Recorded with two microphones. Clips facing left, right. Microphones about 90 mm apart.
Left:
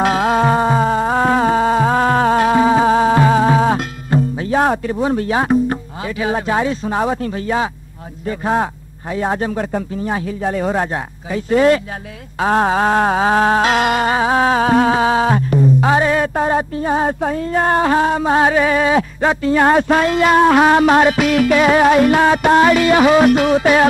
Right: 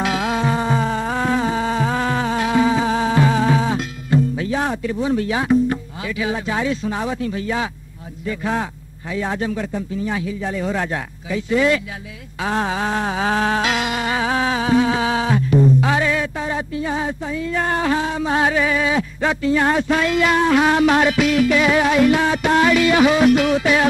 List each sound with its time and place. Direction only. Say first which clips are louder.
0.0 s music: left 6 dB; 45° left (ahead or behind)
4.4 s speech: left 6 dB; 45° left (ahead or behind)
9.1 s music: left 4 dB; 40° left (ahead or behind)
14.1 s music: left 5 dB; 35° left (ahead or behind)
21.3 s music: left 3 dB; 55° left (ahead or behind)
22.5 s music: left 2 dB; 40° left (ahead or behind)